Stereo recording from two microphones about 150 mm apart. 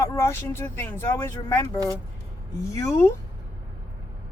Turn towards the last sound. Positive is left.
turn(degrees=20)  # may be behind; listen again after turning